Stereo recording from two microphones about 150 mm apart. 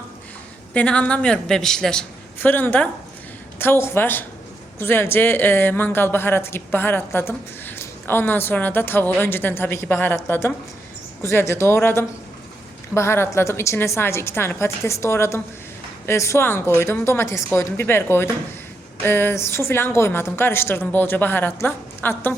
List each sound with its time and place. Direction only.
0.7 s a woman's voice: 10° left (ahead or behind)